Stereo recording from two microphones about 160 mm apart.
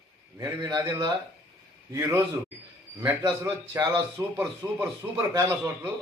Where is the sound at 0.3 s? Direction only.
25° right (ahead or behind).